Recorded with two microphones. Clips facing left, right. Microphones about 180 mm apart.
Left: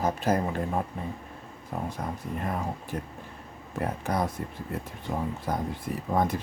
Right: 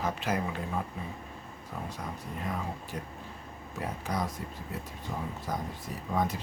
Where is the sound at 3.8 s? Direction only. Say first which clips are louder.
Left 5 dB; 55° left (ahead or behind).